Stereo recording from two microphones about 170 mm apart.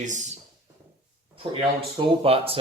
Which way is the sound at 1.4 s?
35° right (ahead or behind).